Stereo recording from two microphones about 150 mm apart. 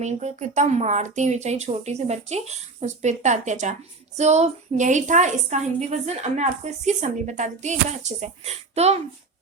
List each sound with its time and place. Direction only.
0.0 s a woman's voice: 50° right (ahead or behind)